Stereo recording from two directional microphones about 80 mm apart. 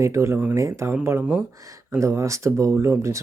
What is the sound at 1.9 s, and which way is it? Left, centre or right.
Speech, right.